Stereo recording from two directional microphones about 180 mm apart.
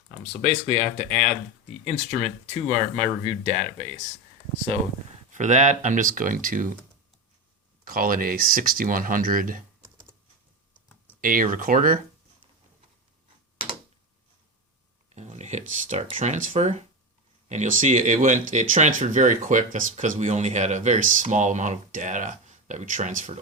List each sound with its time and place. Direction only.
0.4 s speech: 35° right (ahead or behind)
5.3 s speech: 45° right (ahead or behind)
7.9 s speech: 50° right (ahead or behind)
10.8 s computer keyboard: 10° left (ahead or behind)
11.2 s speech: 50° right (ahead or behind)
15.1 s speech: 40° right (ahead or behind)